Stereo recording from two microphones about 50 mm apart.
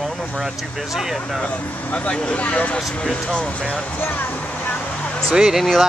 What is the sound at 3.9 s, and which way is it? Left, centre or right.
Speech, left.